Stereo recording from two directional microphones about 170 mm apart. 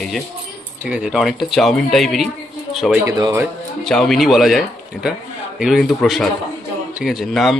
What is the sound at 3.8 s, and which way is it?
Speech, centre (ahead or behind).